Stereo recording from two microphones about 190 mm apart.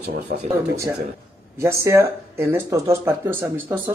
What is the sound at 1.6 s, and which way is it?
Speech, 15° right (ahead or behind).